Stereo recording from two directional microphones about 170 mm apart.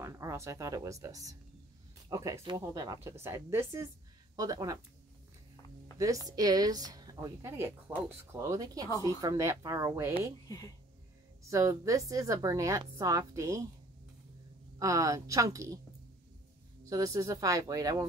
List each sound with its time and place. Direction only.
0.0 s a woman's voice: 20° right (ahead or behind)
5.9 s a woman's voice: 20° right (ahead or behind)
11.5 s a woman's voice: 20° right (ahead or behind)
14.8 s a woman's voice: 20° right (ahead or behind)
16.9 s a woman's voice: 20° right (ahead or behind)